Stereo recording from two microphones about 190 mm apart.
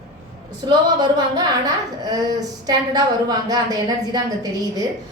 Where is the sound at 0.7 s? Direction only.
20° right (ahead or behind).